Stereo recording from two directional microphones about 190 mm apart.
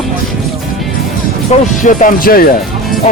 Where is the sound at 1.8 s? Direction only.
45° left (ahead or behind).